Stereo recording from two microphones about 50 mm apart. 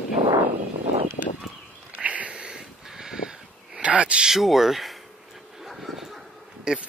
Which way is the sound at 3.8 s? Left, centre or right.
Right.